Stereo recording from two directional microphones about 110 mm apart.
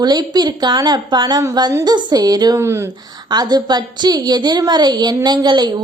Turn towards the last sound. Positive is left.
turn(degrees=-40)  # may be behind; listen again after turning